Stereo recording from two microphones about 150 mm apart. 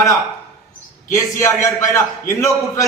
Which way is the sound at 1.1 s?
20° left (ahead or behind).